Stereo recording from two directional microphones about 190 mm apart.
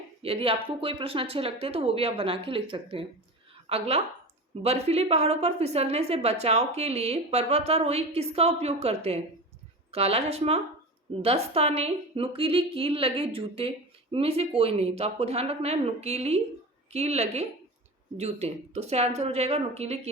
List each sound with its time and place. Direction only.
0.2 s a woman's voice: 30° right (ahead or behind)